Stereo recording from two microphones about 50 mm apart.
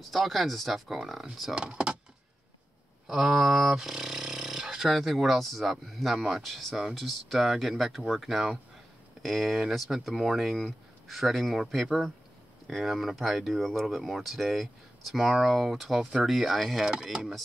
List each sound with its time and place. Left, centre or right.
0.1 s speech: centre
1.5 s speech: centre
3.1 s speech: centre
16.8 s speech: centre